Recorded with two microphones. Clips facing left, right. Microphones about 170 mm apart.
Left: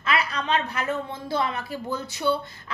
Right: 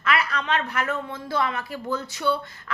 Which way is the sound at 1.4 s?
30° left (ahead or behind).